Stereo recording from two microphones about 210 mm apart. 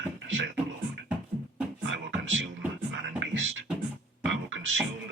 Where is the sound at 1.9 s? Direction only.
60° right (ahead or behind).